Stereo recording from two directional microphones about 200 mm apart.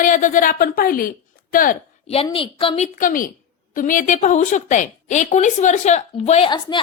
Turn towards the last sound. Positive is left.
turn(degrees=25)  # may be behind; listen again after turning